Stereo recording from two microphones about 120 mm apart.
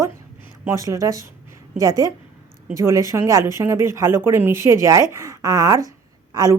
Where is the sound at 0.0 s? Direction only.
20° right (ahead or behind).